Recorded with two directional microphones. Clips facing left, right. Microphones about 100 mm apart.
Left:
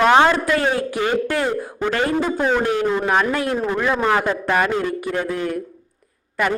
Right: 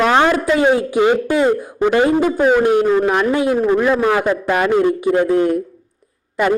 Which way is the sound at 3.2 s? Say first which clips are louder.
Right 5 dB; 15° right (ahead or behind).